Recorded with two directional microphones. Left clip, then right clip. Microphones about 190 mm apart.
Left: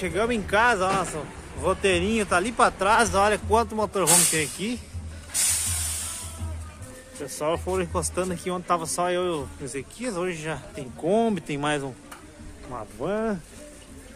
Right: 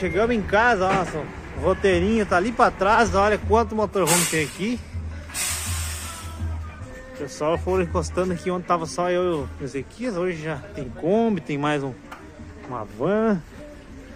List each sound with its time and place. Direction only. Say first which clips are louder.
0.0 s speech: right 4 dB; centre (ahead or behind)
7.2 s speech: right 3 dB; centre (ahead or behind)
13.0 s speech: right 6 dB; 15° right (ahead or behind)